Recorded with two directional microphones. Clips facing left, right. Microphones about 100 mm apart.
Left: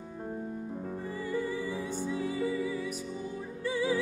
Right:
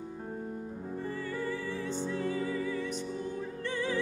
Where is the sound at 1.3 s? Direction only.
15° left (ahead or behind).